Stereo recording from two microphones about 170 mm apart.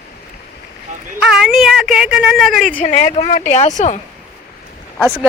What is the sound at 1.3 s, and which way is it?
A woman's voice, centre (ahead or behind).